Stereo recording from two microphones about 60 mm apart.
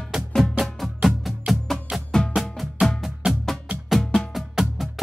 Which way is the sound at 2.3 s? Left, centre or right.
Centre.